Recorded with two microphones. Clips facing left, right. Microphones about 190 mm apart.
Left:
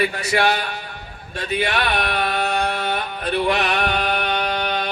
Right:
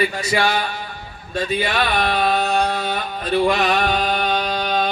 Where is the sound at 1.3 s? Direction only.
65° left (ahead or behind).